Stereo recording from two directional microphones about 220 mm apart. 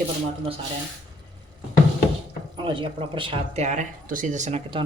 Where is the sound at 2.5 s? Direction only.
20° right (ahead or behind).